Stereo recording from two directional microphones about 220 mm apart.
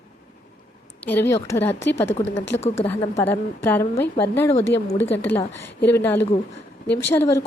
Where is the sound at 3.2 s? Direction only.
10° left (ahead or behind).